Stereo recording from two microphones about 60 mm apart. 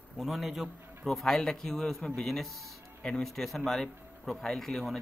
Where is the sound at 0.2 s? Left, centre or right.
Centre.